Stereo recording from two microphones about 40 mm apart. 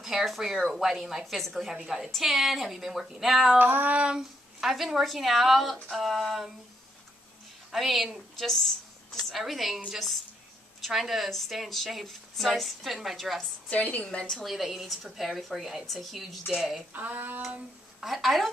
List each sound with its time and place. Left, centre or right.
0.0 s speech: centre
3.5 s female singing: right
3.9 s a sound: right
4.2 s a woman's voice: centre
7.7 s a woman's voice: centre
13.7 s a woman's voice: left
14.4 s a woman's voice: centre
16.9 s female singing: right
18.0 s a woman's voice: centre